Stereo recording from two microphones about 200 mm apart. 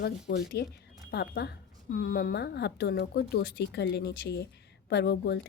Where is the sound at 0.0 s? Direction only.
55° left (ahead or behind).